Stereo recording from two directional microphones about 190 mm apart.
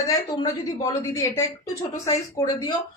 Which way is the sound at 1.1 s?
15° left (ahead or behind).